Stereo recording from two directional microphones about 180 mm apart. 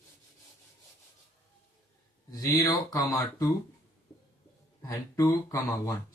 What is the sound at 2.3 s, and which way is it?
Speech, 20° left (ahead or behind).